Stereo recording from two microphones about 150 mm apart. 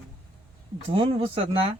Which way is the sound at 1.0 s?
35° right (ahead or behind).